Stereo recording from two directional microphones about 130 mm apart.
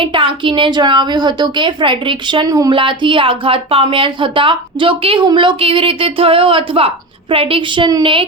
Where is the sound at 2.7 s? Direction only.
40° right (ahead or behind).